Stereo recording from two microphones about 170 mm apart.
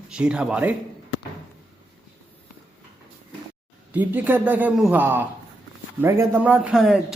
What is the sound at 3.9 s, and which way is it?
A man's voice, 10° right (ahead or behind).